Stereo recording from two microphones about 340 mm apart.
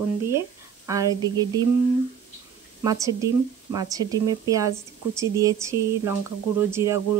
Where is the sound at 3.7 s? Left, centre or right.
Centre.